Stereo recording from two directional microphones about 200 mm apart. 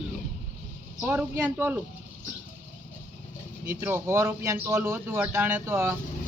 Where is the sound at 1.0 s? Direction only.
10° right (ahead or behind).